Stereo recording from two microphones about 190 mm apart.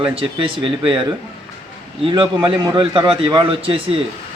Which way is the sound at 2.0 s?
25° right (ahead or behind).